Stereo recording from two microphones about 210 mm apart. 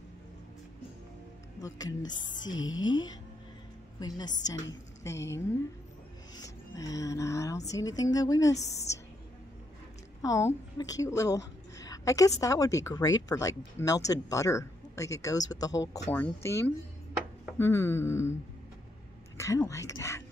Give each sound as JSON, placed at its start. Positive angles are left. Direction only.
{"t": 1.6, "sound": "a woman's voice", "side_deg": 15}
{"t": 10.2, "sound": "a woman's voice", "side_deg": 15}
{"t": 19.3, "sound": "speech", "side_deg": 15}